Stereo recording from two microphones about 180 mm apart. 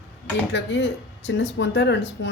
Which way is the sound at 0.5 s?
85° left.